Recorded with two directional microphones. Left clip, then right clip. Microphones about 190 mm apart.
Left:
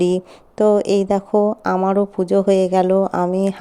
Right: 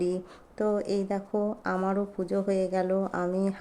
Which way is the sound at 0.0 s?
40° left (ahead or behind).